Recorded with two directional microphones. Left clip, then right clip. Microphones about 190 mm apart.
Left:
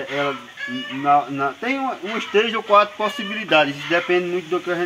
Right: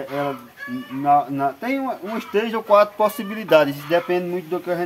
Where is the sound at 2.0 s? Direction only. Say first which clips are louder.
Left 6 dB; 60° right (ahead or behind).